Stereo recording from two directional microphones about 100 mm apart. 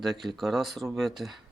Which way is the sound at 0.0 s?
Centre (ahead or behind).